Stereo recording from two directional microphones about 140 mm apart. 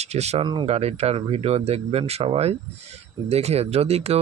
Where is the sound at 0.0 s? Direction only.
50° right (ahead or behind).